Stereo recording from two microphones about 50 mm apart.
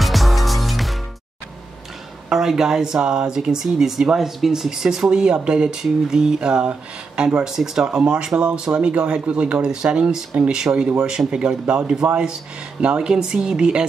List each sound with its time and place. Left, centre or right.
0.0 s music: centre
2.2 s speech: centre